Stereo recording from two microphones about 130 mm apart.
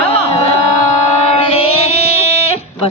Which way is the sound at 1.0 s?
50° left (ahead or behind).